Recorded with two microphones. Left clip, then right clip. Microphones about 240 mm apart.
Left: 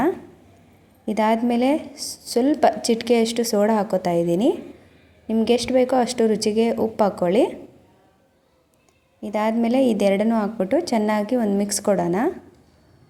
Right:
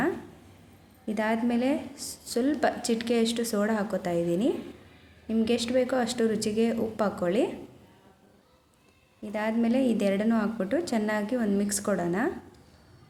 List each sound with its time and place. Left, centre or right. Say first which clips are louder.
1.0 s a woman's voice: left 8 dB; left
9.2 s a woman's voice: left 7 dB; left